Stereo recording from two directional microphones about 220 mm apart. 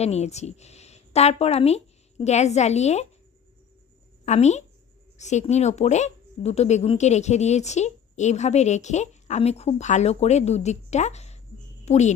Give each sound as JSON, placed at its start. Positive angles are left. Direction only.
{"t": 0.0, "sound": "speech", "side_deg": 30}
{"t": 4.3, "sound": "speech", "side_deg": 30}